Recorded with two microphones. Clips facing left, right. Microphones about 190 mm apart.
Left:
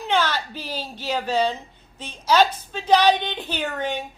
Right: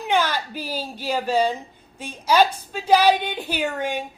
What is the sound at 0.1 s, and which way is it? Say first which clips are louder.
A woman's voice: right 1 dB; 10° right (ahead or behind).